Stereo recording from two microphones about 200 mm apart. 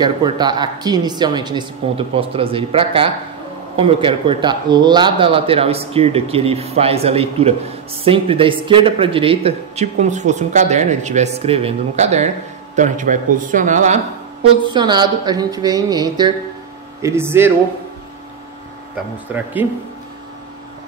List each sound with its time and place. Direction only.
0.0 s speech: 20° right (ahead or behind); by 13.9 s 40° right (ahead or behind)
14.7 s speech: 20° right (ahead or behind)
19.3 s speech: 10° right (ahead or behind)